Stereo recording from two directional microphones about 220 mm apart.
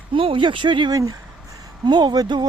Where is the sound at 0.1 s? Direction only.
25° right (ahead or behind).